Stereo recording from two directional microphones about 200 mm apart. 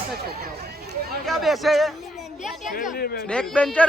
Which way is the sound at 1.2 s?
Centre (ahead or behind).